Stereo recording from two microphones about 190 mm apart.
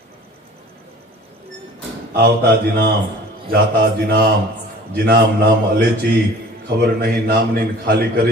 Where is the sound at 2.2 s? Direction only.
55° right (ahead or behind).